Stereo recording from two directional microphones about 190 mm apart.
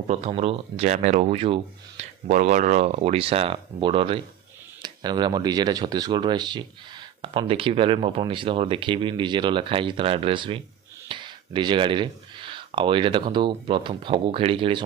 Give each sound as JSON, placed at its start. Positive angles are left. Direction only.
{"t": 0.1, "sound": "speech", "side_deg": -30}